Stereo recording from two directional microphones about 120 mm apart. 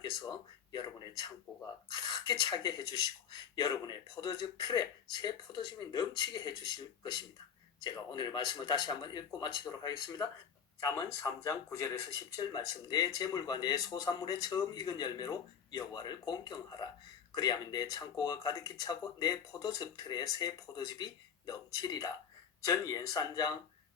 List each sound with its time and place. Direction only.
0.0 s speech: 35° left (ahead or behind)